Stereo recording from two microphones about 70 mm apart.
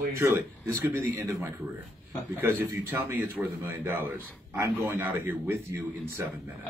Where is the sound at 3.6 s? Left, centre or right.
Right.